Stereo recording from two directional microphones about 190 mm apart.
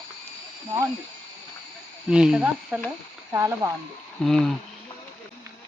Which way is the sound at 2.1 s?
5° right (ahead or behind).